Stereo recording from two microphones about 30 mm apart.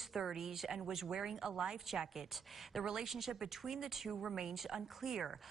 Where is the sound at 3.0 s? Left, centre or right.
Centre.